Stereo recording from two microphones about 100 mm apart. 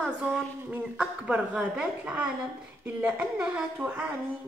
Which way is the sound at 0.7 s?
10° right (ahead or behind).